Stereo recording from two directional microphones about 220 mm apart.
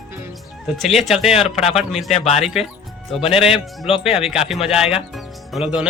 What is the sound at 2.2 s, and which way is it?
Speech, 30° left (ahead or behind).